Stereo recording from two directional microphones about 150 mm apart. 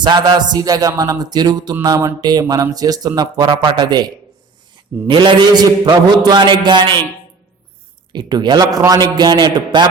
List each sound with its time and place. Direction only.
0.0 s a man's voice: 30° right (ahead or behind)
8.1 s speech: 30° right (ahead or behind)